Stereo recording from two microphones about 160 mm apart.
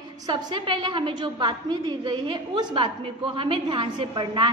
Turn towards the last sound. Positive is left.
turn(degrees=-30)  # may be behind; listen again after turning